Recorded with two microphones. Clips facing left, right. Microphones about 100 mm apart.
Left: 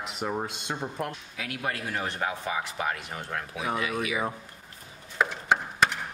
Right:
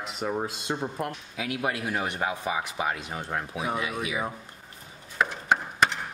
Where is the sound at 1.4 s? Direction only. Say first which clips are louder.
Right 4 dB; 15° right (ahead or behind).